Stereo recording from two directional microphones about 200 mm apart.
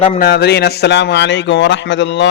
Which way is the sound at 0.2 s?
55° left (ahead or behind).